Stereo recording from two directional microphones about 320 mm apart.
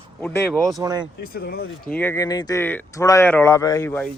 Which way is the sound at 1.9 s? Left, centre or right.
Centre.